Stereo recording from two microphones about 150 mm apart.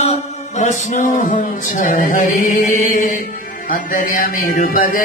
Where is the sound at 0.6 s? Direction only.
55° left (ahead or behind).